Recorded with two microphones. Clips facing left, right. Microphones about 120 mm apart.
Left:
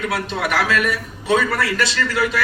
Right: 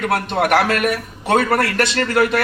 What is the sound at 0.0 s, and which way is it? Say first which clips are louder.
A man's voice: right 4 dB; 55° right (ahead or behind).